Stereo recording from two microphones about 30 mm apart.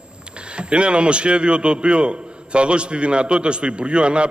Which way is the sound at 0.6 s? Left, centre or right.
Right.